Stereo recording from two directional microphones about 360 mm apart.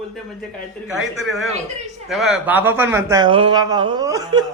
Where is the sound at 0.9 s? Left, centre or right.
Centre.